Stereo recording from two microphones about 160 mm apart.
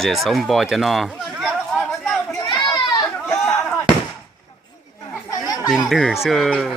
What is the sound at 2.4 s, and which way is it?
Children playing, 30° left (ahead or behind).